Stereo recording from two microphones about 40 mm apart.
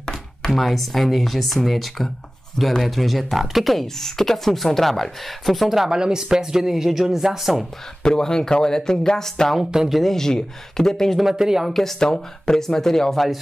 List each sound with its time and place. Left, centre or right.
0.0 s a sound: centre
0.5 s speech: centre
5.9 s speech: centre
8.0 s speech: centre
9.6 s speech: centre
9.9 s speech: centre
11.1 s speech: centre
12.0 s speech: centre